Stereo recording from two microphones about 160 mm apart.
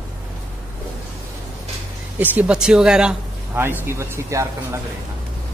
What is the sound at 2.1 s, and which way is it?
Speech, 10° right (ahead or behind).